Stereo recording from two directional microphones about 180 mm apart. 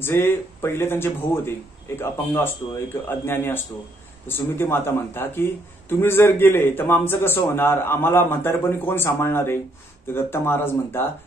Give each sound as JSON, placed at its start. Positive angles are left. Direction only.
{"t": 0.0, "sound": "speech", "side_deg": 10}